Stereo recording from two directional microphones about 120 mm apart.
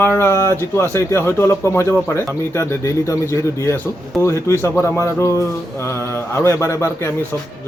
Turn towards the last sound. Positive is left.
turn(degrees=25)  # may be behind; listen again after turning